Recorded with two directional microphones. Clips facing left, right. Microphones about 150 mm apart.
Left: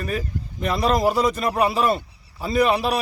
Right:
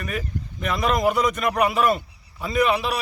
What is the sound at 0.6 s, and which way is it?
A man's voice, 35° left (ahead or behind).